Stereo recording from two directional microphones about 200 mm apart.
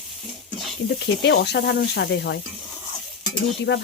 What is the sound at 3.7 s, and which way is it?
Speech, 60° left (ahead or behind).